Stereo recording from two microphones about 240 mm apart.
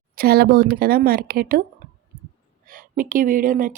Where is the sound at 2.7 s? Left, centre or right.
Right.